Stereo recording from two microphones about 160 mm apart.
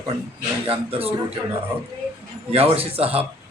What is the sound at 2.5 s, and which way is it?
Speech, 40° right (ahead or behind).